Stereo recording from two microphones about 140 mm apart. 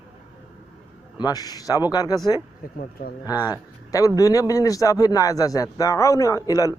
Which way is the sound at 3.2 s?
25° left (ahead or behind).